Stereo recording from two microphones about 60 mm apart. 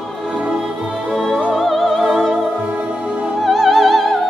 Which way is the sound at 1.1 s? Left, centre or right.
Centre.